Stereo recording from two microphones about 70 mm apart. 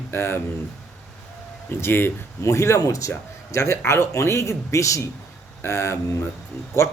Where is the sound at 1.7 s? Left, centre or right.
Left.